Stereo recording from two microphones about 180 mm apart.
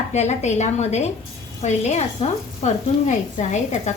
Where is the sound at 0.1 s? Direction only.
40° left (ahead or behind).